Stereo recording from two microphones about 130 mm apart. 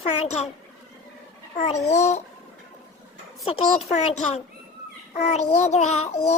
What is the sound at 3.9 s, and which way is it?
A child's voice, 55° left (ahead or behind).